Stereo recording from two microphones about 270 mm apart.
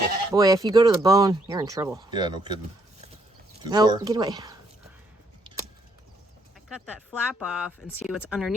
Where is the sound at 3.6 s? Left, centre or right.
Centre.